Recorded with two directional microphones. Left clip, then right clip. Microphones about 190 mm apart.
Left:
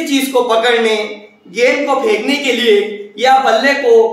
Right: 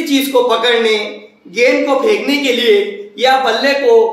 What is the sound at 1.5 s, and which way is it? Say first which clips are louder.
A man's voice: right 1 dB; 5° right (ahead or behind).